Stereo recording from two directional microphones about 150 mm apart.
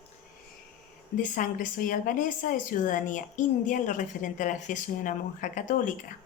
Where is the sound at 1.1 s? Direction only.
60° left (ahead or behind).